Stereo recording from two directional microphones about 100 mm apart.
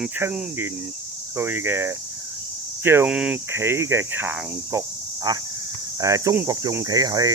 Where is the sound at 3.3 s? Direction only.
25° right (ahead or behind).